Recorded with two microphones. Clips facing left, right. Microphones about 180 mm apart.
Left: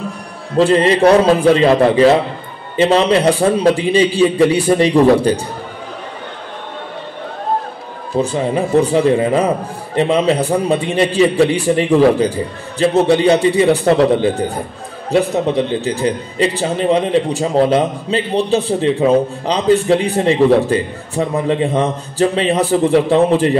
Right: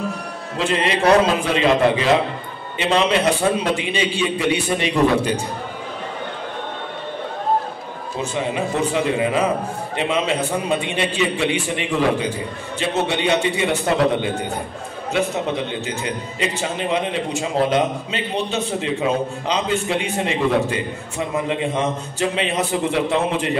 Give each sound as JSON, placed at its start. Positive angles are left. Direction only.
{"t": 0.6, "sound": "a man's voice", "side_deg": 35}
{"t": 8.2, "sound": "a man's voice", "side_deg": 35}